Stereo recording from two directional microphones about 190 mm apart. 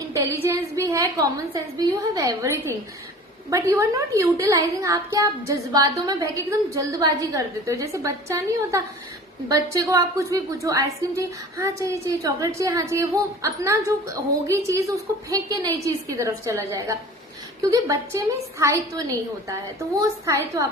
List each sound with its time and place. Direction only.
0.1 s a woman's voice: 15° right (ahead or behind)